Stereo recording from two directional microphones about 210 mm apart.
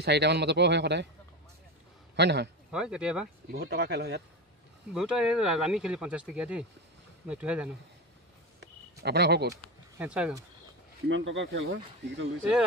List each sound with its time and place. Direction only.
0.0 s speech: 50° right (ahead or behind)
2.1 s speech: 55° right (ahead or behind)
2.7 s speech: 5° right (ahead or behind)
3.5 s speech: 50° right (ahead or behind)
4.9 s speech: 5° right (ahead or behind)
8.5 s a sound: 50° right (ahead or behind)
9.9 s speech: 5° right (ahead or behind)
11.1 s speech: 60° right (ahead or behind)